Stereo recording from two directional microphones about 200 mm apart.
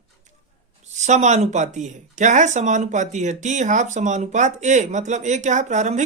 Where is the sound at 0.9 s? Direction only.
35° right (ahead or behind).